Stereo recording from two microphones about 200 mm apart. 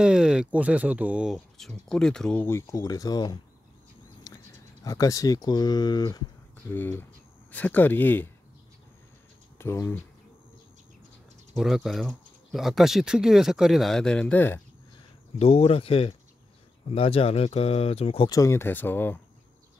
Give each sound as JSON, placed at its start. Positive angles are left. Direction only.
{"t": 0.0, "sound": "speech", "side_deg": -5}
{"t": 4.2, "sound": "a sound", "side_deg": 15}
{"t": 4.8, "sound": "speech", "side_deg": 15}
{"t": 9.6, "sound": "speech", "side_deg": 10}
{"t": 11.5, "sound": "speech", "side_deg": 0}
{"t": 15.3, "sound": "speech", "side_deg": 30}
{"t": 18.3, "sound": "speech", "side_deg": 15}